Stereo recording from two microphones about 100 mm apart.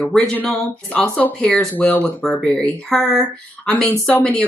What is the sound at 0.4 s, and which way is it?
Speech, 15° left (ahead or behind).